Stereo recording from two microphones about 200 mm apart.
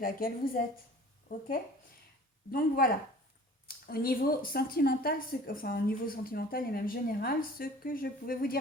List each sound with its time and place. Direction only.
0.0 s a woman's voice: 45° left (ahead or behind)
2.5 s a woman's voice: 45° left (ahead or behind)